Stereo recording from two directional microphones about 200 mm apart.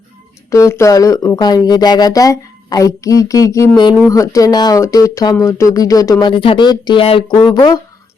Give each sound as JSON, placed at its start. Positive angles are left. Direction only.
{"t": 0.5, "sound": "speech", "side_deg": 15}